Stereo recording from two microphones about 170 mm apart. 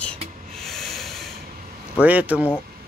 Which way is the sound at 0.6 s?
Centre (ahead or behind).